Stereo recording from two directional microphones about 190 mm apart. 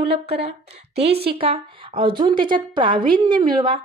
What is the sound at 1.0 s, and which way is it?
Speech, 55° right (ahead or behind).